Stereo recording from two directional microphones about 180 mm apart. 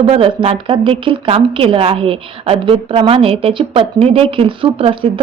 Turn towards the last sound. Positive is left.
turn(degrees=-30)  # may be behind; listen again after turning